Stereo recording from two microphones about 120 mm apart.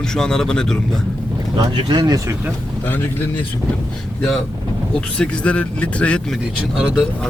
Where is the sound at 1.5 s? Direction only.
35° right (ahead or behind).